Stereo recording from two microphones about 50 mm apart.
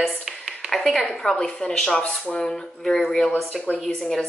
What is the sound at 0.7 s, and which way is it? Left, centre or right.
Speech, centre.